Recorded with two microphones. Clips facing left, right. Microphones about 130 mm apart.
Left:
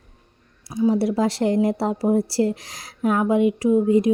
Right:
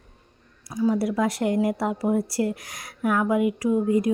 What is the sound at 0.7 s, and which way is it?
A woman's voice, 25° left (ahead or behind).